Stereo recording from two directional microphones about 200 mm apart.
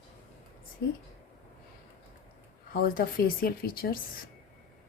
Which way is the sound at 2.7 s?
45° left (ahead or behind).